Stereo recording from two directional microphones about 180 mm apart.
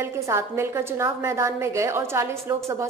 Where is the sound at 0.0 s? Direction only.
15° right (ahead or behind).